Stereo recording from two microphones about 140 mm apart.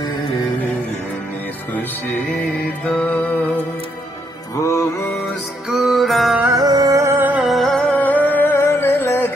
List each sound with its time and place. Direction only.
1.7 s music: 15° left (ahead or behind)
4.6 s music: 20° left (ahead or behind)
5.7 s music: centre (ahead or behind)
6.5 s music: 25° right (ahead or behind)
7.4 s music: centre (ahead or behind); by 9.3 s 15° left (ahead or behind)